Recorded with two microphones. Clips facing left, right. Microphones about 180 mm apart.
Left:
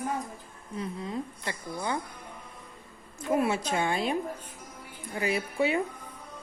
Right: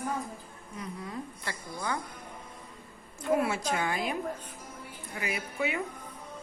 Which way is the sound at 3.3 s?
20° left (ahead or behind).